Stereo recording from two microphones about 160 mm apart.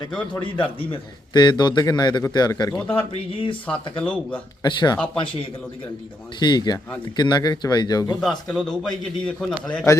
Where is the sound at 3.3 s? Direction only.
30° left (ahead or behind).